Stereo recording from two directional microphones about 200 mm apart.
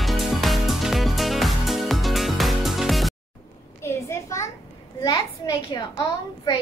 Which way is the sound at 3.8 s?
15° left (ahead or behind).